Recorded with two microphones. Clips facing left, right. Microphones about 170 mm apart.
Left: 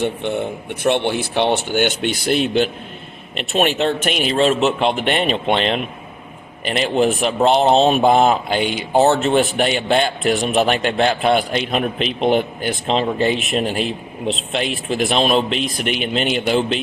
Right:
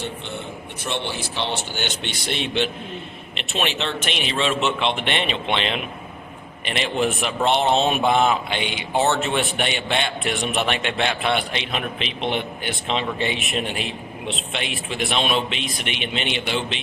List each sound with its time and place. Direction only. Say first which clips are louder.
0.0 s speech: left 10 dB; 55° left (ahead or behind)
2.0 s speech: left 9 dB; 5° left (ahead or behind)
3.3 s a man's voice: left 8 dB; 45° left (ahead or behind)
13.8 s speech: left 7 dB; centre (ahead or behind)
15.1 s speech: left 5 dB; 35° left (ahead or behind)